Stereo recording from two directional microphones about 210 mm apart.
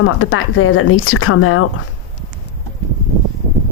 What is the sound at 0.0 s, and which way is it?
Speech, 80° left.